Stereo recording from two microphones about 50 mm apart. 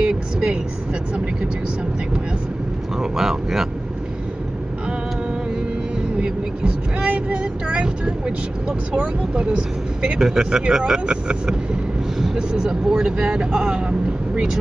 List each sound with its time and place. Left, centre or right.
0.0 s vehicle: centre
3.0 s vehicle: centre
6.2 s vehicle: centre
7.1 s speech: right; by 13.7 s centre
13.7 s speech: centre